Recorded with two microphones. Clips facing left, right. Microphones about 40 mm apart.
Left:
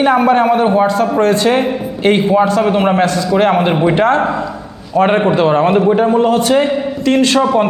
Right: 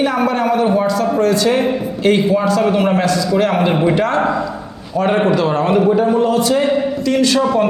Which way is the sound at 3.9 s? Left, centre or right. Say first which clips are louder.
Left 3 dB; left.